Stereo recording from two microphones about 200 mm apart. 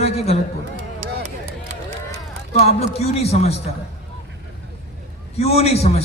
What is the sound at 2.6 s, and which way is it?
Speech, 30° left (ahead or behind).